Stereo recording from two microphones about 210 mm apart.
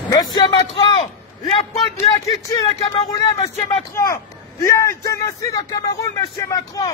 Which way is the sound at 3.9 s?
15° left (ahead or behind).